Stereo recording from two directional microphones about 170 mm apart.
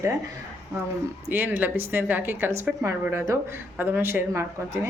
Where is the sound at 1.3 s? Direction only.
10° right (ahead or behind).